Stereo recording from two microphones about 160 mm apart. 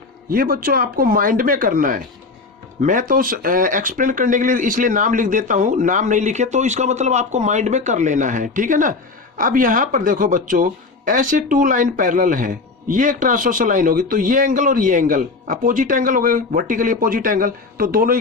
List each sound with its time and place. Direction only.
0.3 s speech: 65° right (ahead or behind)